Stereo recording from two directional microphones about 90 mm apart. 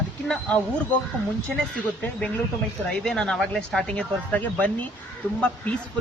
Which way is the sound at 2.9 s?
5° left (ahead or behind).